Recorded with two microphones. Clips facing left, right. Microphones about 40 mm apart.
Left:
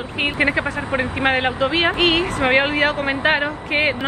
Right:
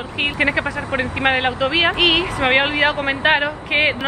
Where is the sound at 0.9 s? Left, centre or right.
Centre.